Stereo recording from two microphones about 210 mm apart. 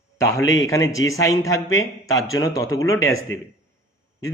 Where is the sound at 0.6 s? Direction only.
15° left (ahead or behind).